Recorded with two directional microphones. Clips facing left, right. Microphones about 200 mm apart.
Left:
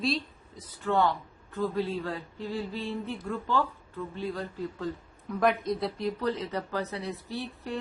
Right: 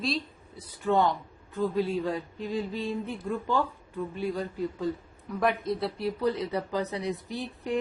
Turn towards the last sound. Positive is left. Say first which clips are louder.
# right 2 dB
turn(degrees=-15)  # may be behind; listen again after turning